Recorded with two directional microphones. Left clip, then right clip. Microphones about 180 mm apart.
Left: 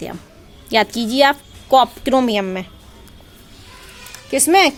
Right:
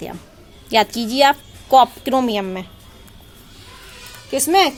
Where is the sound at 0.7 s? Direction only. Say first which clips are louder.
Even; 10° left (ahead or behind).